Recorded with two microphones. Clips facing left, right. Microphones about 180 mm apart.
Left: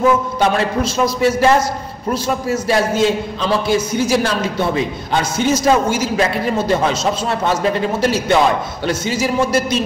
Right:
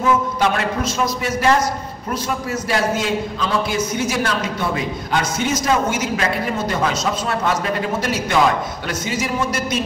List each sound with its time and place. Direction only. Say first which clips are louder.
0.6 s a man's voice: left 4 dB; 30° left (ahead or behind)